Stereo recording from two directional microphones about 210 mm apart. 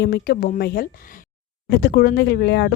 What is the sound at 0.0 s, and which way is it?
Speech, 50° left (ahead or behind).